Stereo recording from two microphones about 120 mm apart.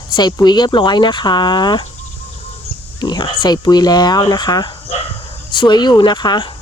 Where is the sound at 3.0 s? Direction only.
40° left (ahead or behind).